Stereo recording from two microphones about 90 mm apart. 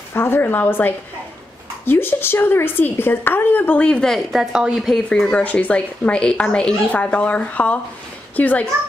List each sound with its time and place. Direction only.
0.1 s a woman's voice: 25° left (ahead or behind); by 4.9 s 10° right (ahead or behind)
4.9 s a woman's voice: 5° left (ahead or behind)